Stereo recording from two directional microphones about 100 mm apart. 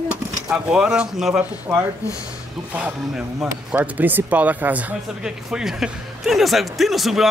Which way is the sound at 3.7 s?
20° right (ahead or behind).